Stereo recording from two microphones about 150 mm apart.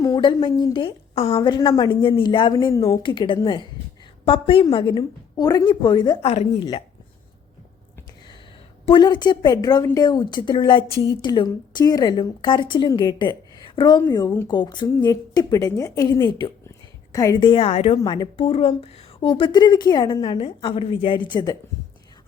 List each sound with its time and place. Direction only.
0.0 s a woman's voice: 30° left (ahead or behind)
1.1 s a woman's voice: 45° left (ahead or behind)
1.4 s a woman's voice: 30° left (ahead or behind)
6.2 s speech: 45° left (ahead or behind)
6.6 s speech: 35° left (ahead or behind)
8.9 s a woman's voice: 30° left (ahead or behind); by 18.1 s 45° left (ahead or behind)
18.1 s speech: 35° left (ahead or behind)